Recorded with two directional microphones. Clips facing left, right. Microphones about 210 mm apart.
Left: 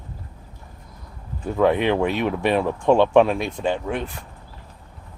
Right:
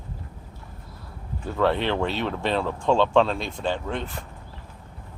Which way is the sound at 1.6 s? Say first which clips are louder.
Left 4 dB; 15° left (ahead or behind).